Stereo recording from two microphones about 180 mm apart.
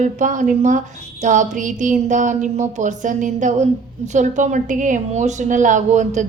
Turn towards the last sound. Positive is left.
turn(degrees=-40)  # may be behind; listen again after turning